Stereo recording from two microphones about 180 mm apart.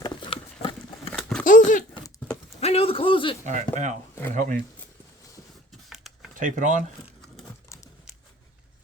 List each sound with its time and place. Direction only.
0.0 s patter: 25° left (ahead or behind)
1.2 s a sound: 5° left (ahead or behind)
1.5 s speech: 45° left (ahead or behind)
2.6 s a man's voice: 35° left (ahead or behind)
3.4 s speech: 40° right (ahead or behind)
5.9 s a sound: centre (ahead or behind)
6.3 s speech: 45° right (ahead or behind)